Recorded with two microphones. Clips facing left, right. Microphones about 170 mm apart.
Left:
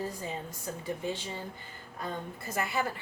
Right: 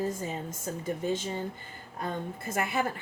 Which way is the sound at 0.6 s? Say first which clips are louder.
Right 3 dB; 45° right (ahead or behind).